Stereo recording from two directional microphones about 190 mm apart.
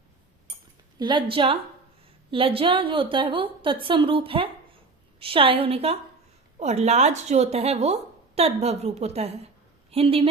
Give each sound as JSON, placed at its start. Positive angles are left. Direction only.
{"t": 0.9, "sound": "a woman's voice", "side_deg": -25}